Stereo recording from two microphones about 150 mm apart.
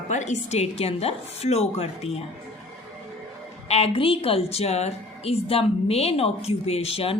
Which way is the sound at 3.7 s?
45° left (ahead or behind).